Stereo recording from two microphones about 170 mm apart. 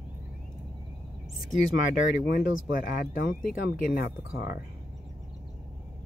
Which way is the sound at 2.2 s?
55° left (ahead or behind).